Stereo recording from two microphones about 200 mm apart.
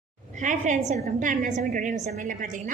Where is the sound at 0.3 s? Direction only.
40° right (ahead or behind).